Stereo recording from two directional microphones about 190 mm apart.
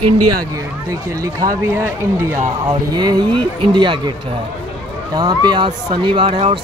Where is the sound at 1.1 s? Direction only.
15° right (ahead or behind).